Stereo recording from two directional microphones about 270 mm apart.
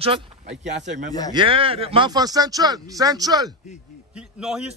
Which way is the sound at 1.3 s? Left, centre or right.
Centre.